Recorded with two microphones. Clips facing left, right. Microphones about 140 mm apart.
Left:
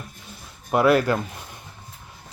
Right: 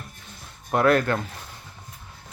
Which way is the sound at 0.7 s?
5° left (ahead or behind).